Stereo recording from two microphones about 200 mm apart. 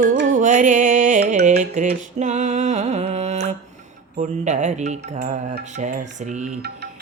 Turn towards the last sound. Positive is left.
turn(degrees=-40)  # may be behind; listen again after turning